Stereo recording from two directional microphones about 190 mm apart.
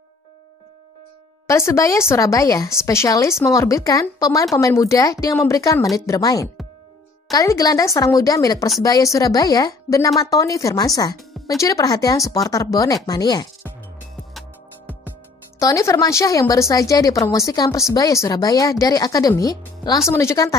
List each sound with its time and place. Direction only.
1.5 s a woman's voice: 15° left (ahead or behind)
15.6 s speech: 15° left (ahead or behind)